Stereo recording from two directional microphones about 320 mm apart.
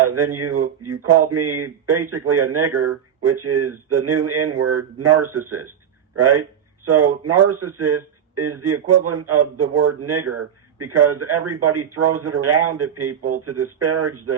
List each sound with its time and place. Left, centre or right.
0.0 s a man's voice: right